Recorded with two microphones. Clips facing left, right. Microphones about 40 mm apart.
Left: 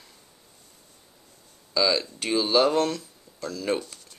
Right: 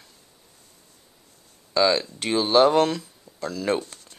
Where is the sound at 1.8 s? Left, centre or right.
Right.